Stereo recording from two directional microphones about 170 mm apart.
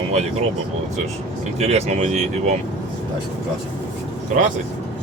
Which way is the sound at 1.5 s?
40° right (ahead or behind).